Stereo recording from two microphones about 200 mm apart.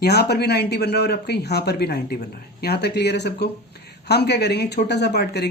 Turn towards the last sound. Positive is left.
turn(degrees=55)  # may be behind; listen again after turning